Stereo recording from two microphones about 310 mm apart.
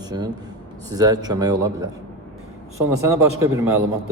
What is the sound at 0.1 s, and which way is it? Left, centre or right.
A man's voice, centre.